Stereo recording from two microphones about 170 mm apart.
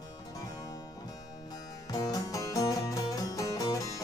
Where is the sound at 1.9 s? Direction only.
20° left (ahead or behind).